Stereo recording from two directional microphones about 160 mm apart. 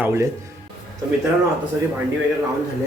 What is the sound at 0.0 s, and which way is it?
Speech, 15° right (ahead or behind).